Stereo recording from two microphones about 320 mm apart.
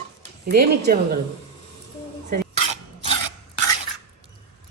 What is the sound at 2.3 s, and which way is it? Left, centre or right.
Dishes, right.